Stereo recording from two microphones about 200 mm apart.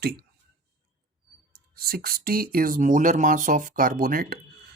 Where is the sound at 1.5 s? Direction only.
45° right (ahead or behind).